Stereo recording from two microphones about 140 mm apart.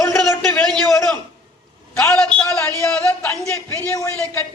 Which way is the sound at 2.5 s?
20° left (ahead or behind).